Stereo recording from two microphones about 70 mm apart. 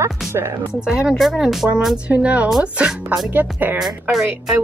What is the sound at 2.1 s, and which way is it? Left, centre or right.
Music, centre.